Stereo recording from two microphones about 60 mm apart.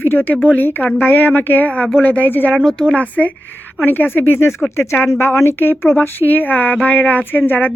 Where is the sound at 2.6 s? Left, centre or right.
Centre.